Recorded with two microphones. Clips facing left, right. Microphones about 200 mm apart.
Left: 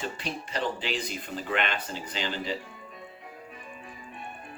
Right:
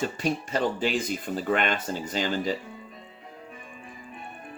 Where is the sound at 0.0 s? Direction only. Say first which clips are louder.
Right 7 dB; 45° right (ahead or behind).